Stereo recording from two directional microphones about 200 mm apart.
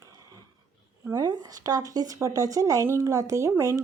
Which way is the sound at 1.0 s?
15° right (ahead or behind).